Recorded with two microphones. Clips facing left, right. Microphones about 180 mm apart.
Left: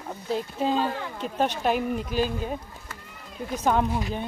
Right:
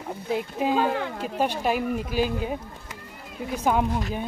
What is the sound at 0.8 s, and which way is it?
Speech, 65° right (ahead or behind).